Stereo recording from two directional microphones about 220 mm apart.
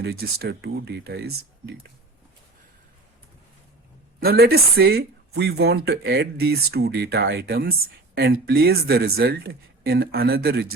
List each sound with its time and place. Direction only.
0.0 s speech: 45° right (ahead or behind)
4.2 s speech: 45° right (ahead or behind)